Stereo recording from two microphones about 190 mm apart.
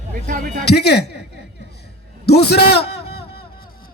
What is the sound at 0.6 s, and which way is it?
Speech, 60° left (ahead or behind).